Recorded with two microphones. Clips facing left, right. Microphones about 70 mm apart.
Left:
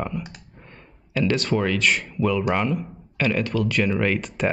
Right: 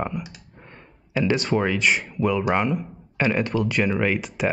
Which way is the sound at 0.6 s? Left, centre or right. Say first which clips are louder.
Right 1 dB; centre.